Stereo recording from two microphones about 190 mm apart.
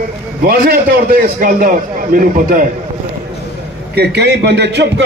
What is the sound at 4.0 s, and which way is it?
A man's voice, 60° right (ahead or behind).